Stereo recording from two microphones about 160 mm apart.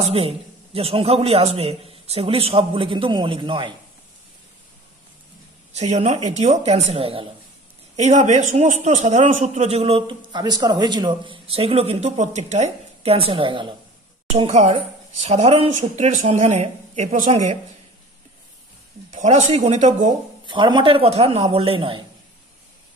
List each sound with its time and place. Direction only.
0.0 s a man's voice: 40° right (ahead or behind)
5.7 s a woman's voice: 45° right (ahead or behind)
19.1 s a woman's voice: 45° right (ahead or behind)
20.4 s a man's voice: 30° right (ahead or behind)